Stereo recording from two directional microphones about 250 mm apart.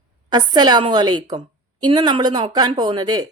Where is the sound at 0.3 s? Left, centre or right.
Centre.